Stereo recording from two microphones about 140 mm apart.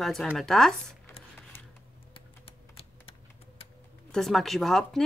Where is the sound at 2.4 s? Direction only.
45° left (ahead or behind).